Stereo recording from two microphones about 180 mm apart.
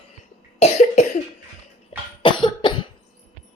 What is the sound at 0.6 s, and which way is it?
Cough, 40° left (ahead or behind).